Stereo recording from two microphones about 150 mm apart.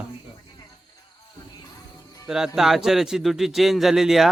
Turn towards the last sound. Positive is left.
turn(degrees=0)  # may be behind; listen again after turning